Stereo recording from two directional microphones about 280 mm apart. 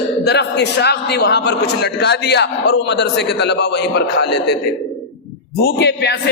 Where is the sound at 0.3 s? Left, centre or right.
Left.